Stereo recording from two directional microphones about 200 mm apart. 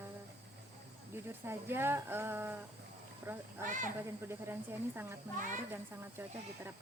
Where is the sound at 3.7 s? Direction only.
40° right (ahead or behind).